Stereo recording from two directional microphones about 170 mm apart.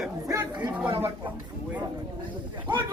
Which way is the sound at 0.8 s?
15° right (ahead or behind).